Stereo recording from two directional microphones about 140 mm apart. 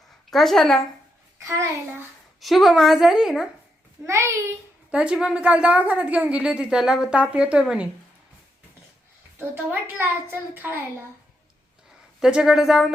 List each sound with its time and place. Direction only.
0.3 s a woman's voice: centre (ahead or behind)
1.4 s a child's voice: 20° right (ahead or behind)
2.4 s a woman's voice: centre (ahead or behind)
4.0 s a child's voice: 20° right (ahead or behind)
4.9 s a woman's voice: 10° right (ahead or behind)
9.6 s a woman's voice: 15° right (ahead or behind)
12.2 s a woman's voice: 5° right (ahead or behind)